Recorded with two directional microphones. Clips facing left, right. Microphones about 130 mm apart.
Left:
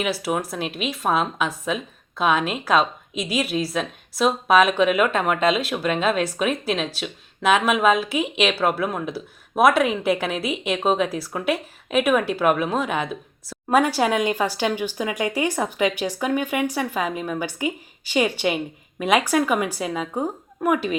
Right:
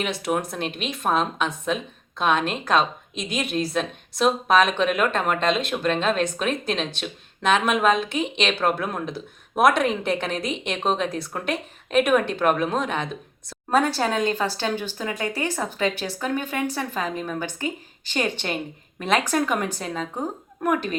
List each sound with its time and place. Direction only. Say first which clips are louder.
0.0 s a woman's voice: left 1 dB; 5° left (ahead or behind)